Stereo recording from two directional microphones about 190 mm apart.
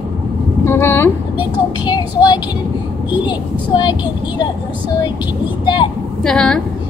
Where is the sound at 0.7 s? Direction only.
15° left (ahead or behind).